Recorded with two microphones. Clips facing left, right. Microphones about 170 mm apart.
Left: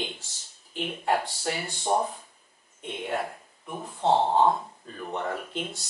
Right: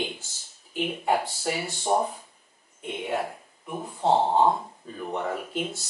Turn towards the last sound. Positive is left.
turn(degrees=-5)  # may be behind; listen again after turning